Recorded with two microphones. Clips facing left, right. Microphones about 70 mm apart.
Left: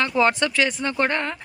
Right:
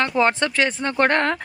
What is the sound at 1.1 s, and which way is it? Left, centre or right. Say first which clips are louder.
Speech: right 6 dB; right.